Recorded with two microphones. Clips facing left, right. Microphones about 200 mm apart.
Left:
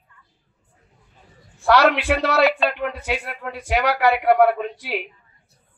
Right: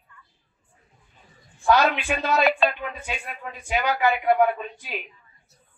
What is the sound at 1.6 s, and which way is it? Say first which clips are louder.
A man's voice: left 4 dB; 70° left (ahead or behind).